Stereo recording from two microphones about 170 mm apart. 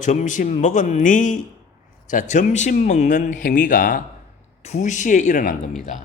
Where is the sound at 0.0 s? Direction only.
45° left (ahead or behind).